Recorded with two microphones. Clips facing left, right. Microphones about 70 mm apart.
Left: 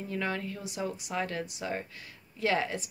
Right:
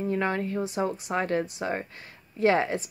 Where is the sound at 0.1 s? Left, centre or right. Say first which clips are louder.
Right 4 dB; right.